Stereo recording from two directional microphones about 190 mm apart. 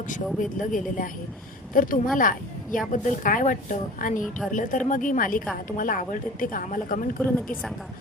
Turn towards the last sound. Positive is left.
turn(degrees=45)  # may be behind; listen again after turning